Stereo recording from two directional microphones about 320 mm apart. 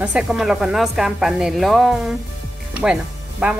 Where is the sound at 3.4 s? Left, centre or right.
Centre.